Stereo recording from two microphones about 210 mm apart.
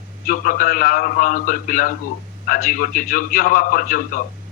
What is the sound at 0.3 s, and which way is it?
A man's voice, 40° left (ahead or behind).